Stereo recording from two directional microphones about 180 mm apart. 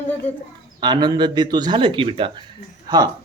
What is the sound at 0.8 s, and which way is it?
Speech, 25° right (ahead or behind).